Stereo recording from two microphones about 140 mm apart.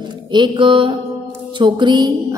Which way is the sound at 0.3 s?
35° right (ahead or behind).